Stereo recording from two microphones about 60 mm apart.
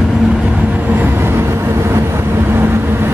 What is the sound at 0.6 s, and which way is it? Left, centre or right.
Vehicle, right.